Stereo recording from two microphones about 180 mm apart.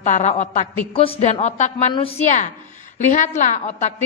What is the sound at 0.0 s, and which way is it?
A woman's voice, 40° left (ahead or behind).